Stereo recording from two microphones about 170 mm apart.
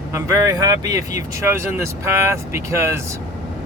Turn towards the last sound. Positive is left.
turn(degrees=-15)  # may be behind; listen again after turning